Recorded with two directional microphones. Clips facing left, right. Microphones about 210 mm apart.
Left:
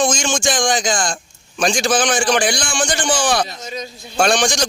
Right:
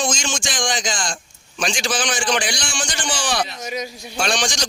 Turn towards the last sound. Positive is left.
turn(degrees=50)  # may be behind; listen again after turning